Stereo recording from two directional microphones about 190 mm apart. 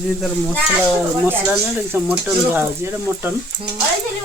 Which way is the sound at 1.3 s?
10° right (ahead or behind).